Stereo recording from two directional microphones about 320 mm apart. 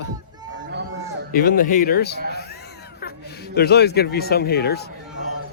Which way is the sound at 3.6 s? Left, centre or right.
Left.